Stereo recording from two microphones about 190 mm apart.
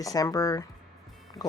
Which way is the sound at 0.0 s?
20° left (ahead or behind).